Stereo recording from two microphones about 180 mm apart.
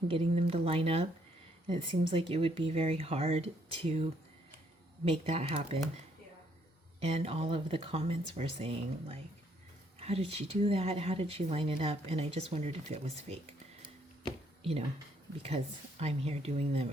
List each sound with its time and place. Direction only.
0.1 s speech: 35° right (ahead or behind)
2.0 s speech: 30° right (ahead or behind)
7.0 s speech: 35° right (ahead or behind)
14.6 s speech: 30° right (ahead or behind)